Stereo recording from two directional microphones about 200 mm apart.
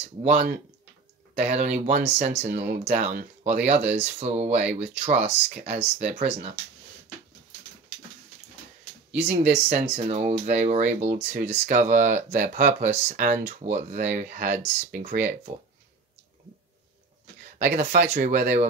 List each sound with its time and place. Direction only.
0.0 s speech: 35° right (ahead or behind)
9.5 s speech: 35° right (ahead or behind)
17.6 s speech: 35° right (ahead or behind)